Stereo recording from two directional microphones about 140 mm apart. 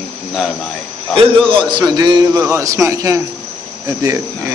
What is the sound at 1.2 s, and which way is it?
A man's voice, 35° right (ahead or behind).